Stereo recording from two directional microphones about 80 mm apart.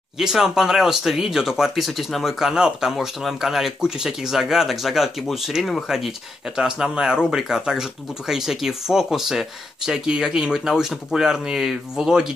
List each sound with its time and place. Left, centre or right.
0.2 s speech: centre